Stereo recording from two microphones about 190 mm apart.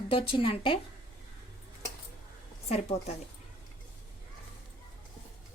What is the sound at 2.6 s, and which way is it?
Speech, 35° left (ahead or behind).